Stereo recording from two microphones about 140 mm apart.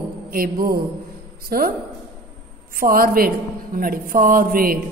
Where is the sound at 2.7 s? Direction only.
90° right.